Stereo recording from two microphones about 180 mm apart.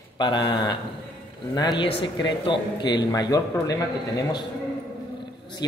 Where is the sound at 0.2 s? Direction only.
25° left (ahead or behind).